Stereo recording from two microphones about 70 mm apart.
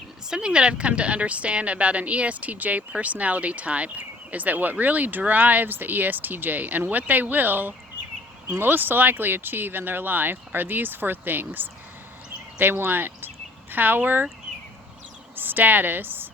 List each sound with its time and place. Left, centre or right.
0.3 s speech: centre; by 14.3 s right
15.4 s speech: right